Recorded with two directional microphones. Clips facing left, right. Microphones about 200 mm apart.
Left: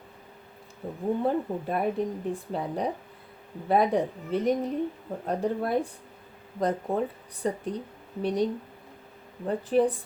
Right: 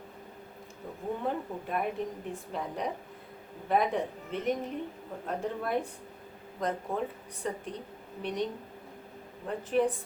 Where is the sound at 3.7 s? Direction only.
35° left (ahead or behind).